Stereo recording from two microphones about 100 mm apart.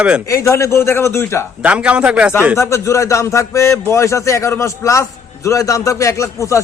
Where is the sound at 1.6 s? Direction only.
10° right (ahead or behind).